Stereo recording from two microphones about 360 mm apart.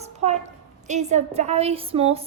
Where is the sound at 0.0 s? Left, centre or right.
Centre.